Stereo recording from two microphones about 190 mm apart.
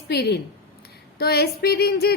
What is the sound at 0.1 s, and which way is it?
A woman's voice, 60° left (ahead or behind).